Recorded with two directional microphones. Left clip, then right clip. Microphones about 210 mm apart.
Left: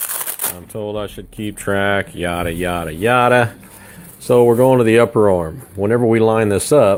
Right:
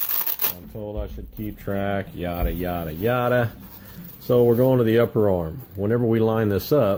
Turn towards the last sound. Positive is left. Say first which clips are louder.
# left 8 dB
turn(degrees=15)  # may be behind; listen again after turning